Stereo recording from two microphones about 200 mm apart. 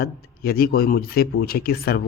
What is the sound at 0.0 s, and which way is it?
Speech, 50° left (ahead or behind).